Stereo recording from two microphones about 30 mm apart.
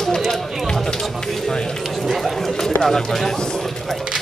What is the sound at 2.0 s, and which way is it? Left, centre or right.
Chatter, centre.